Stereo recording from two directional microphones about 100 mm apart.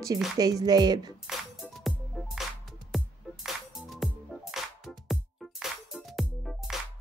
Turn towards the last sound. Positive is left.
turn(degrees=0)  # may be behind; listen again after turning